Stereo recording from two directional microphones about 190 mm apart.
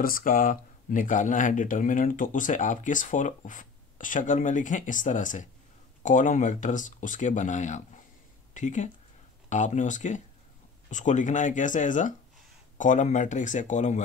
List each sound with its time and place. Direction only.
0.0 s speech: 45° left (ahead or behind)